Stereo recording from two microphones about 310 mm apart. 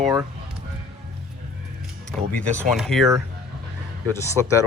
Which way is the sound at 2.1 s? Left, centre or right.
Centre.